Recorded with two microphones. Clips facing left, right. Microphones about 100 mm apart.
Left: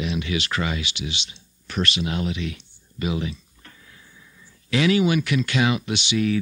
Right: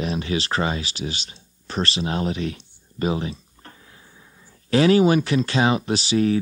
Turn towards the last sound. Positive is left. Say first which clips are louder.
# right 3 dB
turn(degrees=-35)  # may be behind; listen again after turning